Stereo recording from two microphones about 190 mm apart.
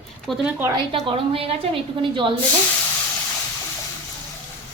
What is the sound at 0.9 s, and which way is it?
A woman's voice, 30° right (ahead or behind).